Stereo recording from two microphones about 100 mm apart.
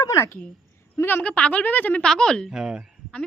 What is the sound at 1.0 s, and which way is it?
A woman's voice, 20° left (ahead or behind).